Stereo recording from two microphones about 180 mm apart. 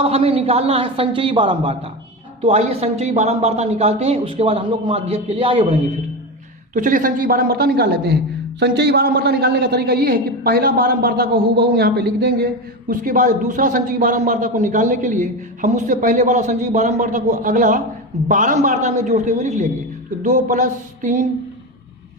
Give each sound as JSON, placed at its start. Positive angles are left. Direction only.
{"t": 0.0, "sound": "a man's voice", "side_deg": -30}
{"t": 6.7, "sound": "a man's voice", "side_deg": -45}
{"t": 12.9, "sound": "a man's voice", "side_deg": -45}